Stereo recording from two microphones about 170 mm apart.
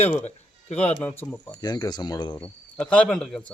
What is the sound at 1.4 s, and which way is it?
Speech, 25° left (ahead or behind).